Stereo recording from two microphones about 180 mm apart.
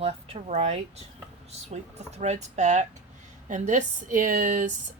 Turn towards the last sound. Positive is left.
turn(degrees=-45)  # may be behind; listen again after turning